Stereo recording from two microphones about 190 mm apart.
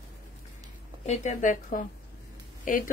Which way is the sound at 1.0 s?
35° left (ahead or behind).